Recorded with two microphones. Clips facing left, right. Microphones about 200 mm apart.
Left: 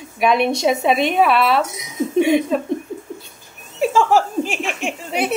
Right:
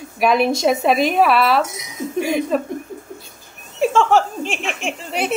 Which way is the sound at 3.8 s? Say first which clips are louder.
Even; 5° left (ahead or behind).